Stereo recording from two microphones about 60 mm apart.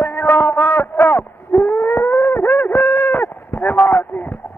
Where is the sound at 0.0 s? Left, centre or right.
Left.